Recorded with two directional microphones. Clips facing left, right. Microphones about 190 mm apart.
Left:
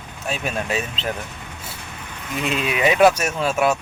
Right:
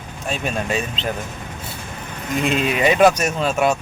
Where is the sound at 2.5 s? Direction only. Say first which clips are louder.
Right 3 dB; 40° right (ahead or behind).